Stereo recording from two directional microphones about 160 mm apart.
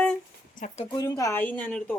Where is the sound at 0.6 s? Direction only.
45° left (ahead or behind).